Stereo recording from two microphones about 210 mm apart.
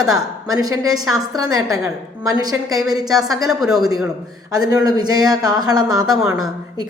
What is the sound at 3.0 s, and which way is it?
A woman's voice, centre (ahead or behind).